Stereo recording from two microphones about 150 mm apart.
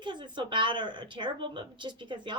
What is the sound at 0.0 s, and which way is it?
Speech, 30° right (ahead or behind).